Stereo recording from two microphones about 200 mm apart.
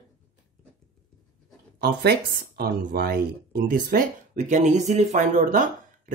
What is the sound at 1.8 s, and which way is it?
Speech, 55° right (ahead or behind).